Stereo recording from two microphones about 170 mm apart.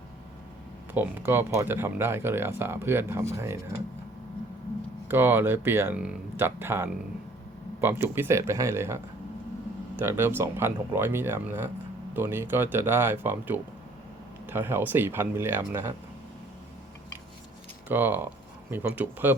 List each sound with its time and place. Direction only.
0.9 s speech: 10° right (ahead or behind)
5.0 s speech: 10° right (ahead or behind)
17.8 s speech: 10° right (ahead or behind)